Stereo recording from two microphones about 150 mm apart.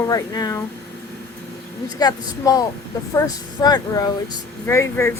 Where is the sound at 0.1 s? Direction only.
25° left (ahead or behind).